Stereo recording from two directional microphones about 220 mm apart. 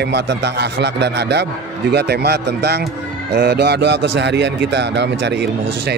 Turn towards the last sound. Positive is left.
turn(degrees=-50)  # may be behind; listen again after turning